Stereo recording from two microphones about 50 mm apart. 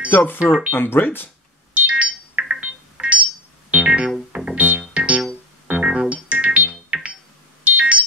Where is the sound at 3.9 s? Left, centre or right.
Right.